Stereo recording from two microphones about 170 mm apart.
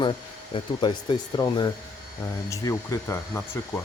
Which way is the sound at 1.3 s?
25° left (ahead or behind).